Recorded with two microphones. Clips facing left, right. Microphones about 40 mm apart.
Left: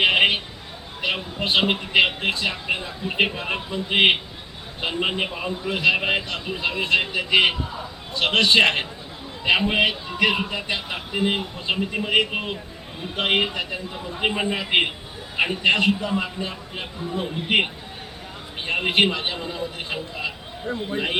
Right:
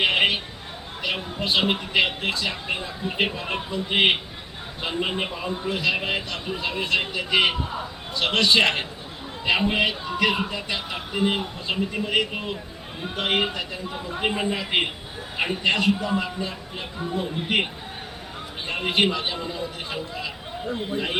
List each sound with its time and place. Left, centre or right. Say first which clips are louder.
0.0 s a sound: left 3 dB; left
1.9 s a man's voice: left 3 dB; left
7.6 s speech: right 1 dB; right
8.1 s a man's voice: left 2 dB; left
11.1 s a man's voice: even; centre
16.0 s a man's voice: even; centre
18.7 s a man's voice: left 2 dB; left